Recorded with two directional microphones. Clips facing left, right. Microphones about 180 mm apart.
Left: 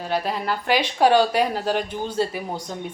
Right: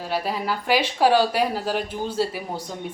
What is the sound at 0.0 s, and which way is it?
Speech, 5° right (ahead or behind).